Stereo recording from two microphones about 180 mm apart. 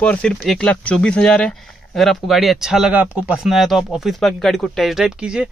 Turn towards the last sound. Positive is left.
turn(degrees=-5)  # may be behind; listen again after turning